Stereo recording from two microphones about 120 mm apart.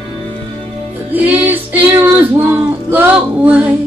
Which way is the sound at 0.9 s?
15° right (ahead or behind).